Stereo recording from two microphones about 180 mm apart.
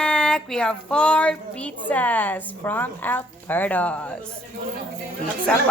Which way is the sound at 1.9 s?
10° left (ahead or behind).